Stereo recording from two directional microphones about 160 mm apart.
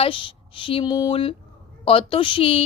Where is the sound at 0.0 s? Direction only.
35° left (ahead or behind).